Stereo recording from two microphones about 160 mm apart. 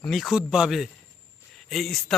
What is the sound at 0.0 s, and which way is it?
A man's voice, centre (ahead or behind).